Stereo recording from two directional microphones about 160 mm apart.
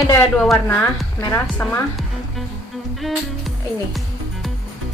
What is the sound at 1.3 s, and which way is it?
Speech, 10° left (ahead or behind).